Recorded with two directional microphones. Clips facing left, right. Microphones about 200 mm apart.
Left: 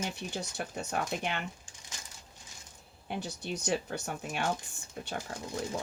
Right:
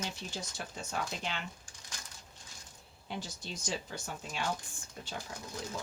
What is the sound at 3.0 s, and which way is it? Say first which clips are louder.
Speech: left 5 dB; 60° left (ahead or behind).